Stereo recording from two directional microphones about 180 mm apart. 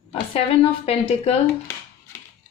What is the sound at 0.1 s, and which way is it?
A woman's voice, 30° left (ahead or behind).